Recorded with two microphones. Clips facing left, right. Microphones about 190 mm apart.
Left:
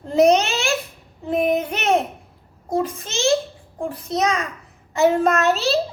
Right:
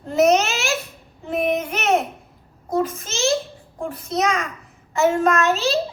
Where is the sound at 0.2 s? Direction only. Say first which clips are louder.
Left 1 dB; 35° left (ahead or behind).